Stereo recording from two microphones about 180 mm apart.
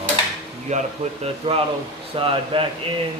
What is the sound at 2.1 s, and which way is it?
Speech, 30° right (ahead or behind).